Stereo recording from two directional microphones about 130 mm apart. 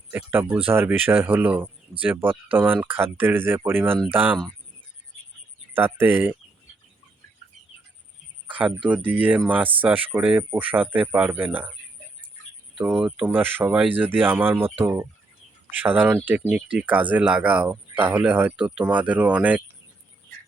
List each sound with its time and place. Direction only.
0.1 s speech: 15° right (ahead or behind)
5.7 s speech: 15° right (ahead or behind)
8.4 s fowl: 10° right (ahead or behind)
9.0 s speech: 10° right (ahead or behind)
12.8 s speech: 15° right (ahead or behind)
15.7 s speech: 15° right (ahead or behind)